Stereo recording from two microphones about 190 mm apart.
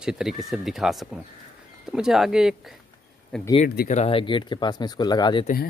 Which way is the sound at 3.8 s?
35° left (ahead or behind).